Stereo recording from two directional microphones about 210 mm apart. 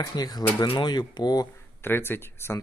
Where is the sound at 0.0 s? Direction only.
20° left (ahead or behind).